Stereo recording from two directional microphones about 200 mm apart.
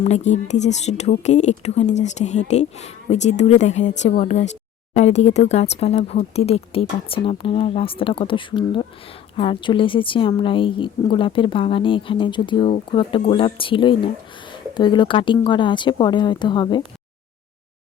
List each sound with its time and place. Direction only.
0.0 s a woman's voice: 35° left (ahead or behind)